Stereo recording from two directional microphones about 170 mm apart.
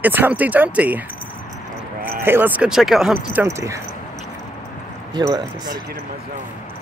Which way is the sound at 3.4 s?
15° right (ahead or behind).